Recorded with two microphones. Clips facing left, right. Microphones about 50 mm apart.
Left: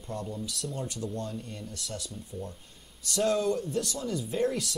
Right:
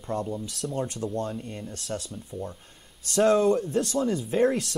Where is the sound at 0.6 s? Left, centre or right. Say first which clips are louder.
Right 8 dB; right.